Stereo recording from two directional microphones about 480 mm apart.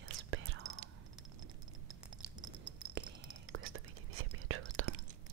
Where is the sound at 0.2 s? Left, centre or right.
Right.